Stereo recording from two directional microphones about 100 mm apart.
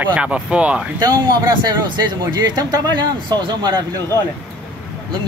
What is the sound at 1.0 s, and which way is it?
A man's voice, 40° right (ahead or behind).